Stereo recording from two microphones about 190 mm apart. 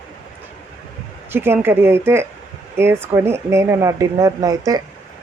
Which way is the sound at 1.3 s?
10° right (ahead or behind).